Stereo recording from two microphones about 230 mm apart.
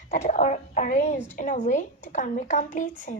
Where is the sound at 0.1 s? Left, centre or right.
Left.